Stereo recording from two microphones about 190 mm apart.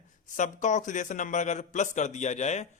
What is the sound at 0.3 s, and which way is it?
A man's voice, 40° left (ahead or behind).